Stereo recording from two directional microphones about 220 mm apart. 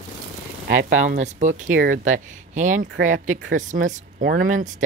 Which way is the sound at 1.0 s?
35° right (ahead or behind).